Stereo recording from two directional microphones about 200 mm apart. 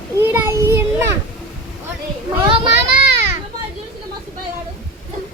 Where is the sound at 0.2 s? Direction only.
10° right (ahead or behind).